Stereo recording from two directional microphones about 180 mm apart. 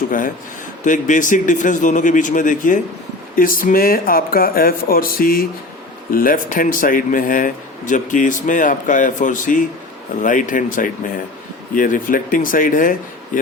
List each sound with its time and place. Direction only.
0.9 s speech: 45° left (ahead or behind)